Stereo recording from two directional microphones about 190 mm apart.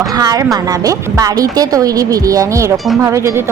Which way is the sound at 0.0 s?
20° right (ahead or behind).